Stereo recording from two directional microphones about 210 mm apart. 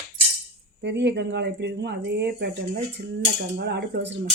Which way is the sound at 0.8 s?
55° right (ahead or behind).